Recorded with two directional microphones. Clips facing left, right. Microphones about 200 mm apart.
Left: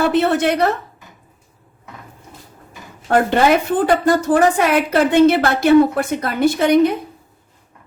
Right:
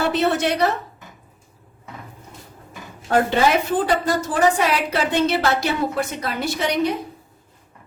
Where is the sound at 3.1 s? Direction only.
55° left (ahead or behind).